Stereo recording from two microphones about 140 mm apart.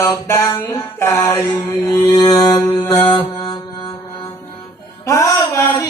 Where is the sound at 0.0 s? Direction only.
15° left (ahead or behind).